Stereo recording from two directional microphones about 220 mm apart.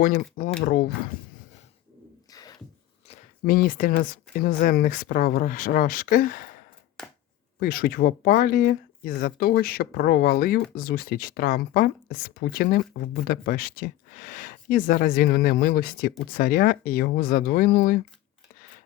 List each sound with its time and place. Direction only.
0.0 s speech: 40° left (ahead or behind)
3.4 s speech: 40° left (ahead or behind)
7.6 s speech: 40° left (ahead or behind)